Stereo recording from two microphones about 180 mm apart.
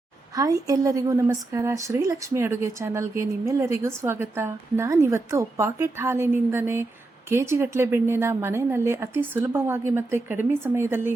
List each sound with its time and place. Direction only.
0.3 s a woman's voice: 20° right (ahead or behind)